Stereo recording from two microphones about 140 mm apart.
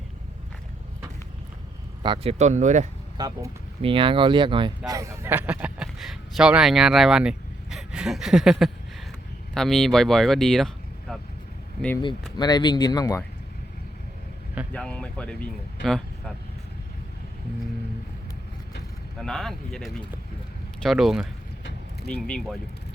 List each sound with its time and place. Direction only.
2.0 s speech: 30° right (ahead or behind)
2.4 s speech: 60° right (ahead or behind)
3.2 s speech: 30° right (ahead or behind)
3.8 s speech: 40° right (ahead or behind)
4.9 s speech: 20° right (ahead or behind); by 10.7 s 5° left (ahead or behind)
11.1 s vehicle: centre (ahead or behind)
12.4 s speech: 30° left (ahead or behind)
14.7 s speech: 5° left (ahead or behind)
19.2 s speech: 5° left (ahead or behind)